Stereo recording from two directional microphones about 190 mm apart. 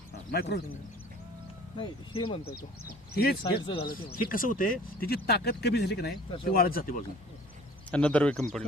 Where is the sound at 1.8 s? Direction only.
25° left (ahead or behind).